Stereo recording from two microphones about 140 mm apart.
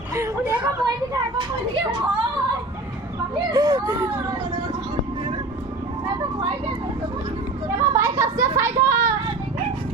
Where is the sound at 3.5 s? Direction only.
30° right (ahead or behind).